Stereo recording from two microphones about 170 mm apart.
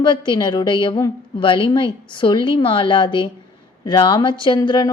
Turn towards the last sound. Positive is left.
turn(degrees=25)  # may be behind; listen again after turning